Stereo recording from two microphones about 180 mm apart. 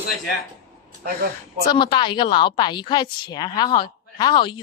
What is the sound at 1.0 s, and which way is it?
Speech, 55° right (ahead or behind).